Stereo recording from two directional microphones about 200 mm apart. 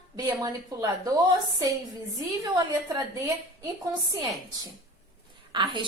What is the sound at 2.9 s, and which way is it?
Speech, 15° right (ahead or behind).